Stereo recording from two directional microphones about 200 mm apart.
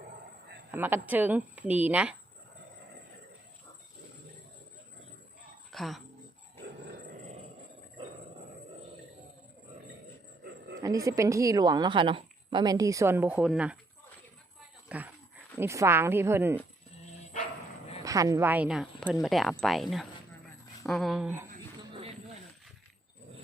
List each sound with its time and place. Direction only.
0.7 s a woman's voice: 10° right (ahead or behind)
5.7 s speech: centre (ahead or behind)
10.8 s a woman's voice: 15° right (ahead or behind)
14.8 s a woman's voice: 10° right (ahead or behind)
18.0 s a woman's voice: 15° right (ahead or behind)
21.8 s a sound: 25° right (ahead or behind)